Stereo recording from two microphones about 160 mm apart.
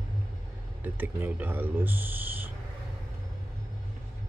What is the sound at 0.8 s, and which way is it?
Speech, 10° right (ahead or behind).